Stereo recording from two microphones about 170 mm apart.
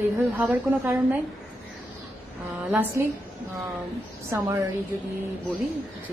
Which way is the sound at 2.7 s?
10° right (ahead or behind).